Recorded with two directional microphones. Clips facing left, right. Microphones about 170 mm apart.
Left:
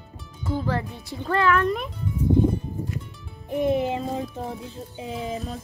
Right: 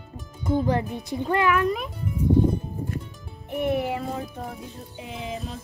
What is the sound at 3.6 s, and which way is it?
A child's voice, 20° left (ahead or behind).